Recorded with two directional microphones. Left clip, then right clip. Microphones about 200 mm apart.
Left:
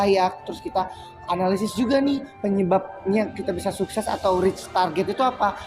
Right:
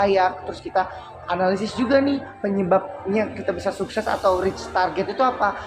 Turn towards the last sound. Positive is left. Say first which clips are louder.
# right 1 dB
turn(degrees=30)  # may be behind; listen again after turning